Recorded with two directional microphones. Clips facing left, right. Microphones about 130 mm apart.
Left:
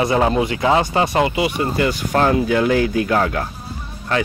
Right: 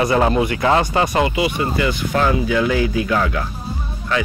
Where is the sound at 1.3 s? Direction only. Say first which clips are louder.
Even; 45° left (ahead or behind).